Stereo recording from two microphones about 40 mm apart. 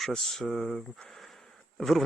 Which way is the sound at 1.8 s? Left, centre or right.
Centre.